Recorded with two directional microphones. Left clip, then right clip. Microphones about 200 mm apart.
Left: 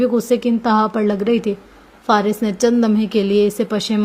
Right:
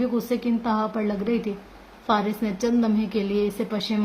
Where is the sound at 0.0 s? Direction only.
40° left (ahead or behind).